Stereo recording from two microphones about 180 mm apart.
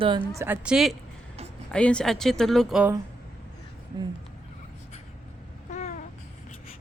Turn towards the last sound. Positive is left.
turn(degrees=40)  # may be behind; listen again after turning